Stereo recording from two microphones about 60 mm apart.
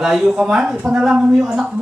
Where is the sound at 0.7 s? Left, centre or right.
Centre.